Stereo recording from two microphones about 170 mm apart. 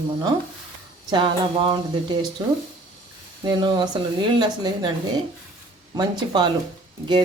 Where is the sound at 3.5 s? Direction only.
25° right (ahead or behind).